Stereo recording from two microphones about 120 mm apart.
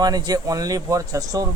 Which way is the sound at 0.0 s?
35° right (ahead or behind).